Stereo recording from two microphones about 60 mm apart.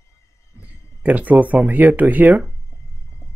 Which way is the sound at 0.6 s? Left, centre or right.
Right.